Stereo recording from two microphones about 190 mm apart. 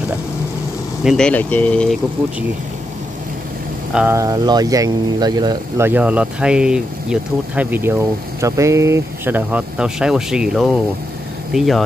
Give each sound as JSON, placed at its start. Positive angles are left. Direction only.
{"t": 1.0, "sound": "speech", "side_deg": 5}
{"t": 3.9, "sound": "speech", "side_deg": -10}
{"t": 5.9, "sound": "speech", "side_deg": -10}